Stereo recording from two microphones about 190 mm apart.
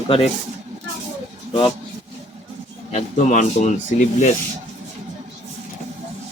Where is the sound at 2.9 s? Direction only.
40° left (ahead or behind).